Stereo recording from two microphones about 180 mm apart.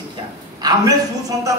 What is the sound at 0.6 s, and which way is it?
Speech, 20° right (ahead or behind).